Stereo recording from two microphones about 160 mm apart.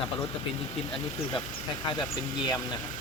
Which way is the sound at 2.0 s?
30° left (ahead or behind).